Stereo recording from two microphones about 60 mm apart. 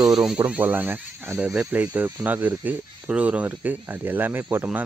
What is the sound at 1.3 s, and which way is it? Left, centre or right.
Speech, right.